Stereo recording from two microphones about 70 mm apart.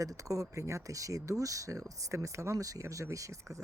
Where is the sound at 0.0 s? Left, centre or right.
Right.